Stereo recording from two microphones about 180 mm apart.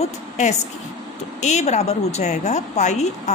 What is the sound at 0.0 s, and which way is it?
A woman's voice, 40° left (ahead or behind).